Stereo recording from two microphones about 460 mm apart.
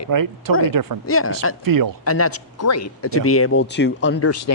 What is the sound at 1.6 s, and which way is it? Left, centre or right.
Speech, right.